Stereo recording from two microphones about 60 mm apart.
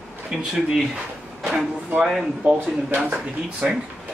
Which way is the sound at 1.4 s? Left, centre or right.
Centre.